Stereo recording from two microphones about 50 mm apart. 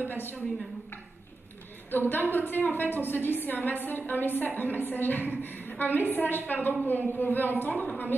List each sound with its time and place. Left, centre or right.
0.1 s a woman's voice: left
1.9 s a woman's voice: left